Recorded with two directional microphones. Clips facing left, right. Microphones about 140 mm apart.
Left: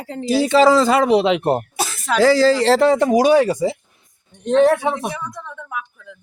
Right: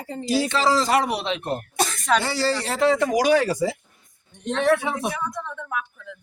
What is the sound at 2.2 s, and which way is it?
Speech, 90° left.